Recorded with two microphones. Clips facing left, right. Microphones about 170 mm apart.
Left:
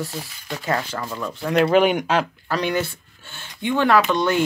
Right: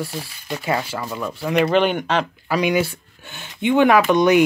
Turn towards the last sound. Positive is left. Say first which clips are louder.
# right 4 dB
turn(degrees=-15)  # may be behind; listen again after turning